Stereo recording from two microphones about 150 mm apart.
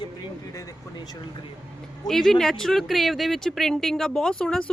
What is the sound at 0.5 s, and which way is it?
Speech, 20° left (ahead or behind).